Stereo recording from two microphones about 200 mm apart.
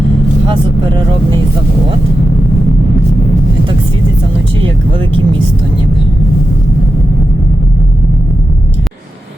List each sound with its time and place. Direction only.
0.4 s speech: 25° right (ahead or behind)
4.6 s speech: 25° right (ahead or behind)